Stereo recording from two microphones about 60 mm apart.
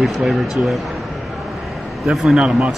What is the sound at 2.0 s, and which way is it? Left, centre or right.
Speech, centre.